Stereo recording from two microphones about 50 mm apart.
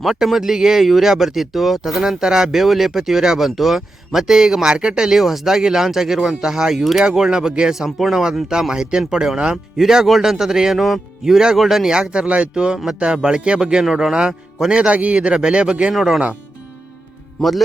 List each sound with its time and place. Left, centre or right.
0.0 s a man's voice: centre
7.0 s a man's voice: centre
9.7 s a man's voice: centre